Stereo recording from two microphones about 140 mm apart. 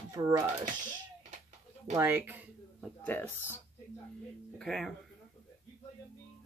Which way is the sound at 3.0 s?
10° left (ahead or behind).